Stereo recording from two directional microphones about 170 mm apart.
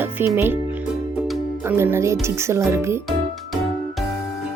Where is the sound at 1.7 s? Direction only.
15° right (ahead or behind).